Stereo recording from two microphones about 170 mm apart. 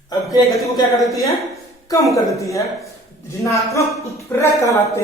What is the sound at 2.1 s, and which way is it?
Speech, 20° left (ahead or behind).